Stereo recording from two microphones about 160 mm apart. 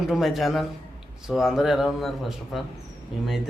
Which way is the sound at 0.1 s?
Centre (ahead or behind).